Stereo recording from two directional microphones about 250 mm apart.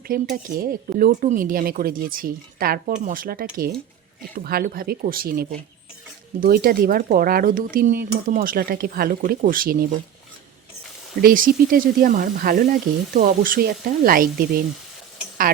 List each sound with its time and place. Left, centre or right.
0.1 s speech: right
11.2 s speech: right